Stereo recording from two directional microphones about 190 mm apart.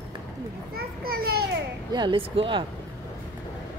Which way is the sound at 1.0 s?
50° right (ahead or behind).